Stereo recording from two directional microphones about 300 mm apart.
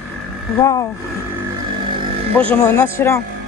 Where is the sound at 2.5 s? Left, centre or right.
Centre.